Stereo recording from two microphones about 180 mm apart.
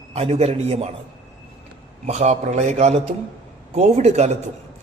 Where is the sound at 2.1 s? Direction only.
35° right (ahead or behind).